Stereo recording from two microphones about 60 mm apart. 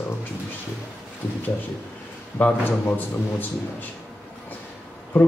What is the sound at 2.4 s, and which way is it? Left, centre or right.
A man's voice, left.